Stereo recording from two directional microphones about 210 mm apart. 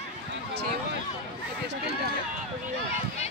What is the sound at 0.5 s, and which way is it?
Speech, 45° right (ahead or behind).